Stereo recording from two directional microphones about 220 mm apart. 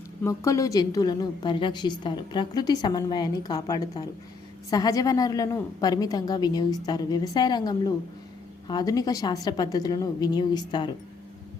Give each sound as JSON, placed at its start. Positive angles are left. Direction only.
{"t": 0.3, "sound": "a woman's voice", "side_deg": 15}